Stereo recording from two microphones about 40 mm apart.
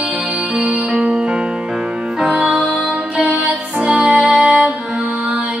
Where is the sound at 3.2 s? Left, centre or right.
Right.